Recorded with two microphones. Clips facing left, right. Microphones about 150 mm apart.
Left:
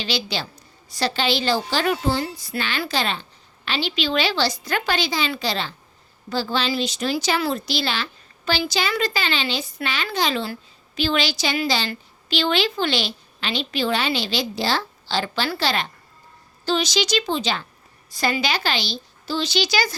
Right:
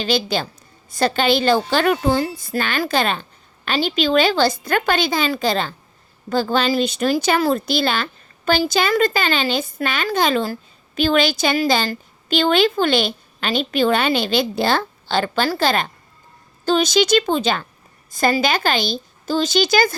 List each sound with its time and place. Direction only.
0.0 s speech: 50° right (ahead or behind)